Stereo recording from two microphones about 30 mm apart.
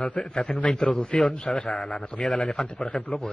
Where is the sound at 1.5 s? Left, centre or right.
Centre.